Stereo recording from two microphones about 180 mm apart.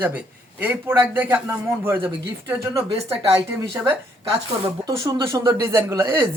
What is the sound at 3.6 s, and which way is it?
A man's voice, 20° right (ahead or behind).